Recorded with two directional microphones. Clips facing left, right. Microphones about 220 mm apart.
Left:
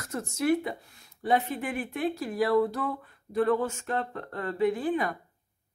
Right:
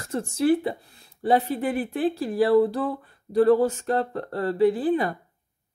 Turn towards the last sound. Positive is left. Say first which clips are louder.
# right 6 dB
turn(degrees=-35)  # may be behind; listen again after turning